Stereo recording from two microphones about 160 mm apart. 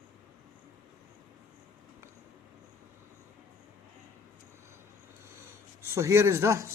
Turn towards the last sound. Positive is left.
turn(degrees=-15)  # may be behind; listen again after turning